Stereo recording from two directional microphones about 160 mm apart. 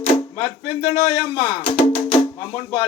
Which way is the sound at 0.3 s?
35° left (ahead or behind).